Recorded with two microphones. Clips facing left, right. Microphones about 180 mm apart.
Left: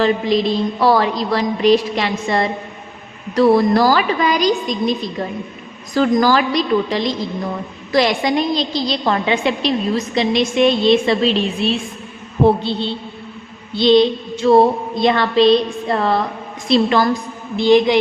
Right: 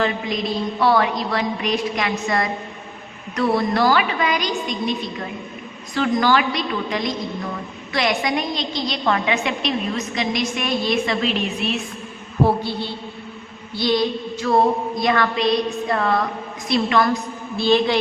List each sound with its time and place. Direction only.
0.8 s a woman's voice: 35° left (ahead or behind)
12.5 s a sound: 25° left (ahead or behind)
16.6 s a woman's voice: 30° left (ahead or behind)
17.6 s speech: 15° left (ahead or behind)